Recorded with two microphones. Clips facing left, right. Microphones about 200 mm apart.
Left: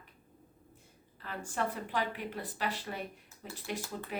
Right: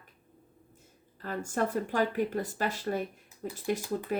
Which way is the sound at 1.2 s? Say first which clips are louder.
Right 5 dB; 45° right (ahead or behind).